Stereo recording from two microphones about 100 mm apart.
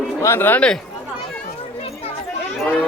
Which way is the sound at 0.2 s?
25° left (ahead or behind).